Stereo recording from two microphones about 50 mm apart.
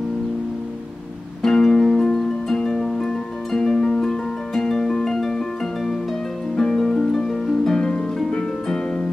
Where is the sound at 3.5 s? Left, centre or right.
Centre.